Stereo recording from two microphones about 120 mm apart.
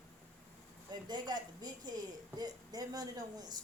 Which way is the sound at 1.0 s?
35° right (ahead or behind).